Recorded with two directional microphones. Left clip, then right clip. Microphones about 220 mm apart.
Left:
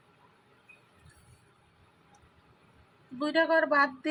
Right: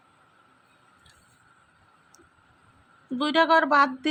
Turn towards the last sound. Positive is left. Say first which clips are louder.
# right 5 dB
turn(degrees=-30)  # may be behind; listen again after turning